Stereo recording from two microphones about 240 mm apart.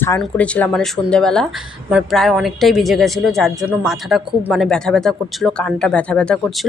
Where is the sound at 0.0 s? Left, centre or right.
Centre.